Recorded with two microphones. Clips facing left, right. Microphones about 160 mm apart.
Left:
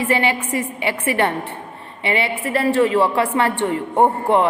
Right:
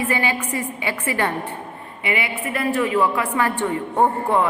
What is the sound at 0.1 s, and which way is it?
A man's voice, 25° left (ahead or behind).